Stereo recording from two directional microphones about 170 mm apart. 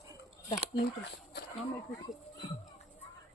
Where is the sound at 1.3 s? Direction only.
80° left.